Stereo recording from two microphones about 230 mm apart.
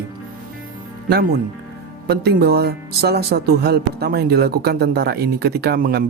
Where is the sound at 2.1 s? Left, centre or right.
Right.